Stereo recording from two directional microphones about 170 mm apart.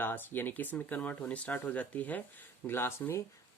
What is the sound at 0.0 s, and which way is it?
Speech, 10° left (ahead or behind).